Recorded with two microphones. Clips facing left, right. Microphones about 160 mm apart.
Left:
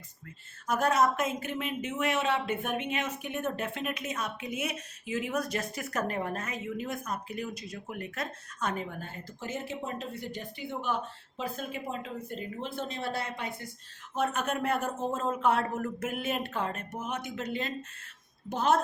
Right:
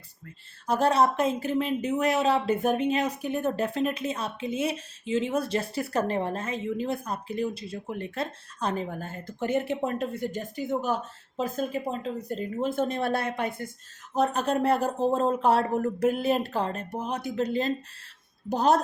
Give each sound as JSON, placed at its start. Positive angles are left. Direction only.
{"t": 0.7, "sound": "speech", "side_deg": -30}
{"t": 14.1, "sound": "speech", "side_deg": -35}